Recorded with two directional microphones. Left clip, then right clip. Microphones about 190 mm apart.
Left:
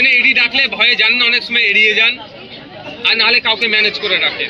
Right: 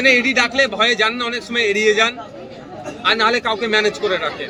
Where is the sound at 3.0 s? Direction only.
20° right (ahead or behind).